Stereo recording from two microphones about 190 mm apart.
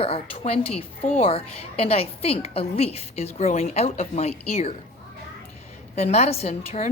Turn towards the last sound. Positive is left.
turn(degrees=35)  # may be behind; listen again after turning